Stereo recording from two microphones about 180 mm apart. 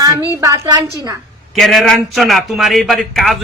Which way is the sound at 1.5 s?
Centre (ahead or behind).